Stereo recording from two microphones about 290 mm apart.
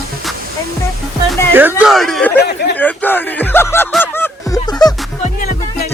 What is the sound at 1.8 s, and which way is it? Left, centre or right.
Speech, centre.